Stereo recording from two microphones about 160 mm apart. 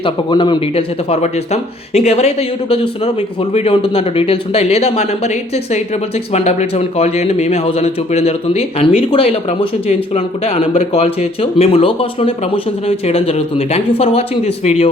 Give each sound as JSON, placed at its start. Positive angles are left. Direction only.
{"t": 0.0, "sound": "speech", "side_deg": 30}
{"t": 6.3, "sound": "speech", "side_deg": 45}